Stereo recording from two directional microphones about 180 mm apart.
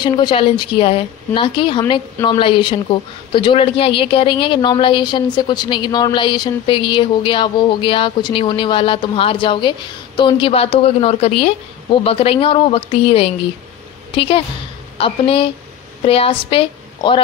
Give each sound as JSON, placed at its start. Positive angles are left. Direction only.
{"t": 0.0, "sound": "a woman's voice", "side_deg": 25}